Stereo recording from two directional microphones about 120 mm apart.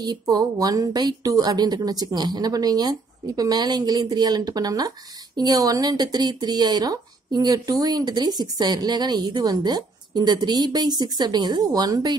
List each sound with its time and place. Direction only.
0.0 s a woman's voice: 35° right (ahead or behind)